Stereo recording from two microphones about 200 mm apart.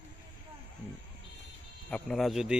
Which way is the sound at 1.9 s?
5° left (ahead or behind).